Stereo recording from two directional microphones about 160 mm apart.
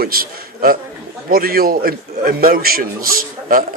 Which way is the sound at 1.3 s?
70° right (ahead or behind).